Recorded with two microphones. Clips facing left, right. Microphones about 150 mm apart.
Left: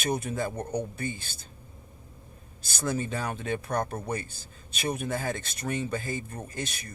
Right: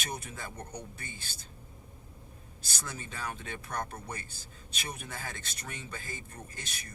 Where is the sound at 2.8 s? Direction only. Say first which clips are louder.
Left 11 dB; 50° left (ahead or behind).